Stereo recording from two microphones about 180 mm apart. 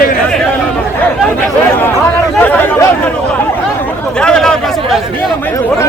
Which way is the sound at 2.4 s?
10° left (ahead or behind).